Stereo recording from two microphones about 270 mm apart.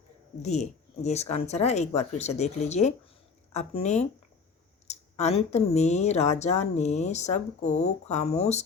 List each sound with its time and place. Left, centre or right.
0.4 s speech: left